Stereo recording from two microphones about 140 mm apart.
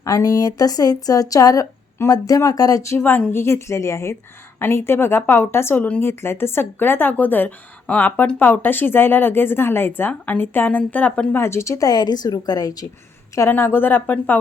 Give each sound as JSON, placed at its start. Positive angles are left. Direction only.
{"t": 0.0, "sound": "a woman's voice", "side_deg": 25}
{"t": 13.3, "sound": "a woman's voice", "side_deg": 15}